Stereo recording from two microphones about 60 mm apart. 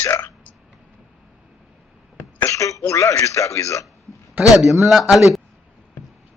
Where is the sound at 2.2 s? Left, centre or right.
Left.